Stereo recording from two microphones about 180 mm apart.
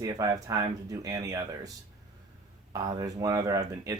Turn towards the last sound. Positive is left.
turn(degrees=-20)  # may be behind; listen again after turning